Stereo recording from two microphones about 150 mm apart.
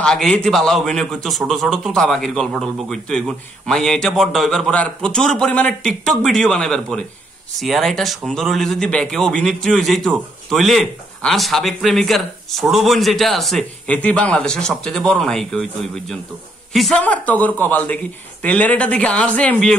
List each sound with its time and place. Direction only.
0.0 s a man's voice: 5° left (ahead or behind)